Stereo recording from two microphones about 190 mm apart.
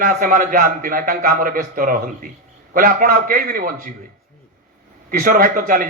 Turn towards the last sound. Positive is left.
turn(degrees=-45)  # may be behind; listen again after turning